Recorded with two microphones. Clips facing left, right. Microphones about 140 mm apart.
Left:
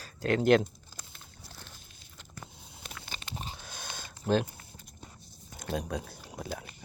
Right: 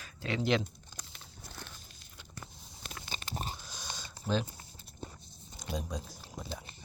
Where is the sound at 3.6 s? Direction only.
60° left (ahead or behind).